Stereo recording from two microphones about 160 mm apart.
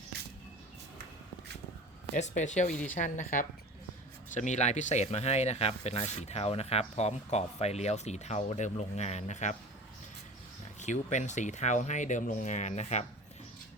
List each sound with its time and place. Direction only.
2.1 s speech: 50° left (ahead or behind)
10.8 s speech: 45° left (ahead or behind)